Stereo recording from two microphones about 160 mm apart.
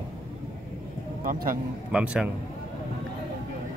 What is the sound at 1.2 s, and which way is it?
Speech, 60° right (ahead or behind).